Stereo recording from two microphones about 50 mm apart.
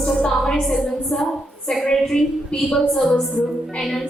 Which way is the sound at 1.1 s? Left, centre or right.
Centre.